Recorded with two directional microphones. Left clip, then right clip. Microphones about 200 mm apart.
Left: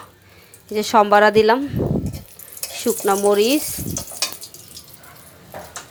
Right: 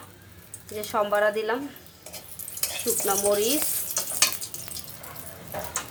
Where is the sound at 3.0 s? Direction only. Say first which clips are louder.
Left 8 dB; 40° left (ahead or behind).